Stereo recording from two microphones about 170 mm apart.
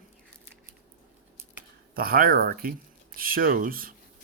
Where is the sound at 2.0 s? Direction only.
60° right (ahead or behind).